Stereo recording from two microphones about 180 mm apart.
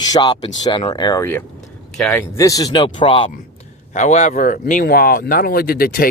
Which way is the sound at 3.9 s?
40° left (ahead or behind).